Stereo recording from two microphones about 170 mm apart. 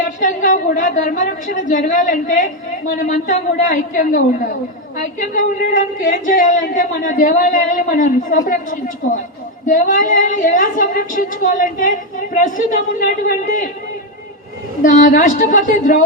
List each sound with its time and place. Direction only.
0.2 s a woman's voice: 50° left (ahead or behind)
14.8 s a woman's voice: 50° left (ahead or behind)